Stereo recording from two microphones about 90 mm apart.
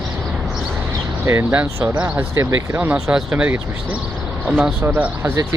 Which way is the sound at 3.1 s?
15° right (ahead or behind).